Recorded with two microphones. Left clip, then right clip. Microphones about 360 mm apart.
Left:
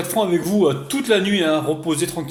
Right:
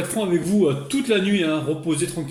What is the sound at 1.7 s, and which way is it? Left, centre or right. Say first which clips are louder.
Speech: left 3 dB; left.